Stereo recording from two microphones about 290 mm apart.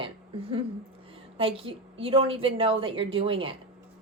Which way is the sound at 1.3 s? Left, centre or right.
Centre.